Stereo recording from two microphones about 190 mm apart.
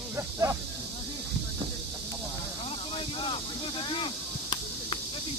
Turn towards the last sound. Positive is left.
turn(degrees=25)  # may be behind; listen again after turning